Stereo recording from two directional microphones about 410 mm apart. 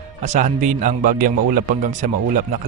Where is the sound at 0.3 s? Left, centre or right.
Centre.